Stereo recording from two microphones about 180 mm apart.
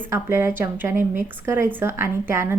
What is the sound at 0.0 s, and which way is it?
A woman's voice, 15° right (ahead or behind).